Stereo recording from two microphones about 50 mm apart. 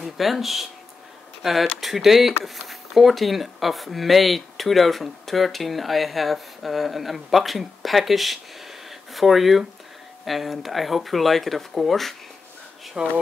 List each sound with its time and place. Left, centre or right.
0.0 s speech: centre
13.0 s speech: right